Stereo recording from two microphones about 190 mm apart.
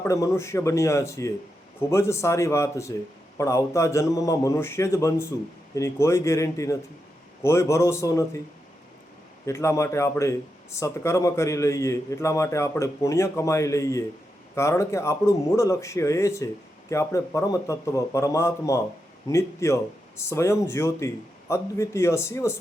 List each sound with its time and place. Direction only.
0.0 s a man's voice: 15° left (ahead or behind)
9.5 s a man's voice: 15° left (ahead or behind)